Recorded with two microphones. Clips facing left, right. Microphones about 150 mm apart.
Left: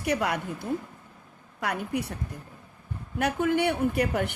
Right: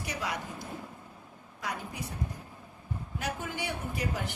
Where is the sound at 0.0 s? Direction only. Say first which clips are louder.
Left 9 dB; 60° left (ahead or behind).